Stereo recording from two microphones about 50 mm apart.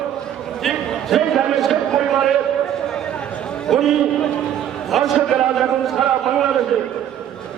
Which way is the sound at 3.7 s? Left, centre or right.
Centre.